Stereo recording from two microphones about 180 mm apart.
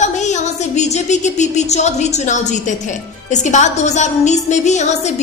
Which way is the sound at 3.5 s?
40° left (ahead or behind).